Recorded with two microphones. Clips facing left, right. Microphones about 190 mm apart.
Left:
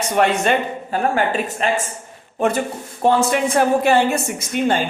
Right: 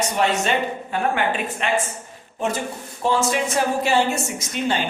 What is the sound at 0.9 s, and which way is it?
Speech, 40° left (ahead or behind).